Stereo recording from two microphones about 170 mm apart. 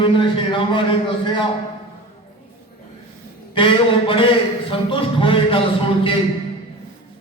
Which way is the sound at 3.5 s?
30° left (ahead or behind).